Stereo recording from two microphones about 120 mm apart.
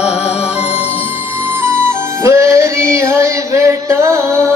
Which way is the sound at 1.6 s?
20° right (ahead or behind).